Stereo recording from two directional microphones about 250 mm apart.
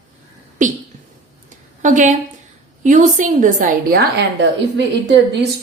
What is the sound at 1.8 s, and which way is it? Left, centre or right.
A woman's voice, right.